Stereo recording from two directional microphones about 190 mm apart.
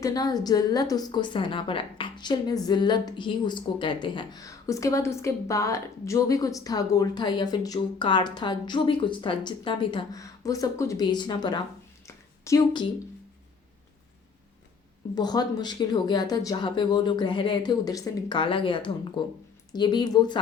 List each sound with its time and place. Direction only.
0.0 s a woman's voice: 20° left (ahead or behind)
12.0 s a sound: 15° left (ahead or behind)
15.1 s a woman's voice: 20° left (ahead or behind)